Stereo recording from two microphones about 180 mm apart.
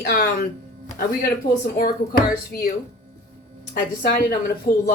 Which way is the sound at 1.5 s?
50° left (ahead or behind).